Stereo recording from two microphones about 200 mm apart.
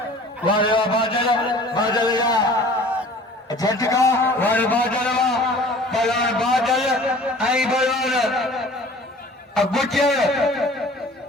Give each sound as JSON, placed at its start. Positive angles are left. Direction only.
{"t": 0.4, "sound": "a man's voice", "side_deg": 25}
{"t": 3.5, "sound": "a man's voice", "side_deg": 20}